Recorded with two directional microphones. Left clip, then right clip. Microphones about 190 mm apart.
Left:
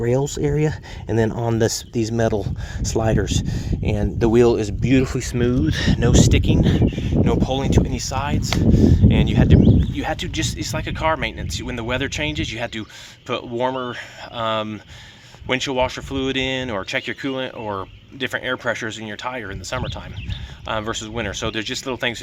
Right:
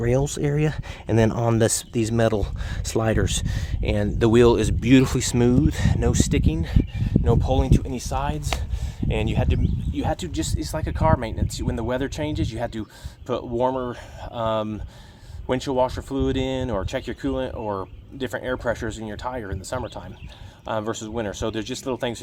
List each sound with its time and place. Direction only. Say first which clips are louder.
0.0 s speech: left 3 dB; 5° right (ahead or behind)
13.9 s speech: left 3 dB; centre (ahead or behind)
17.6 s speech: left 1 dB; 15° left (ahead or behind)
18.2 s speech: left 4 dB; 5° left (ahead or behind)